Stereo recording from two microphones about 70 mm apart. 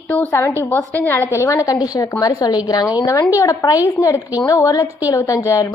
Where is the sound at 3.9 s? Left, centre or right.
Left.